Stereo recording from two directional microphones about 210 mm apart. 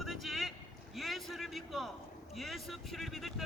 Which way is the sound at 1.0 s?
Centre (ahead or behind).